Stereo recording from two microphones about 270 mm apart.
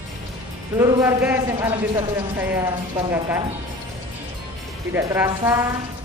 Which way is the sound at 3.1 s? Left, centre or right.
Centre.